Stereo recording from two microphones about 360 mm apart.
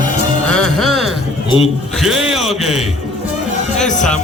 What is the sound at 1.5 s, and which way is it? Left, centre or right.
Speech, centre.